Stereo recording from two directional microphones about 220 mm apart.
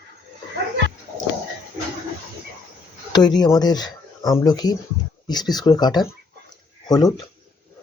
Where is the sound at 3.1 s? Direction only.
20° left (ahead or behind).